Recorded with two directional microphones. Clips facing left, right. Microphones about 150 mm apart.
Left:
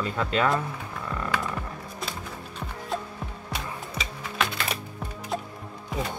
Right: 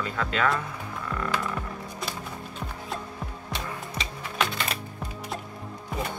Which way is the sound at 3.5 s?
5° left (ahead or behind).